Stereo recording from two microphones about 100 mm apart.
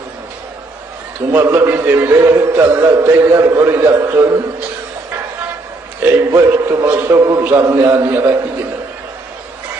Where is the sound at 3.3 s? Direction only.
30° right (ahead or behind).